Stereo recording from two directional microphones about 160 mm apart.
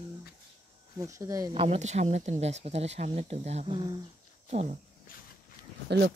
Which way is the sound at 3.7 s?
30° right (ahead or behind).